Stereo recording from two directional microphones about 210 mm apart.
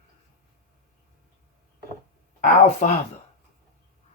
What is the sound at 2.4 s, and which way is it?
Speech, 35° left (ahead or behind).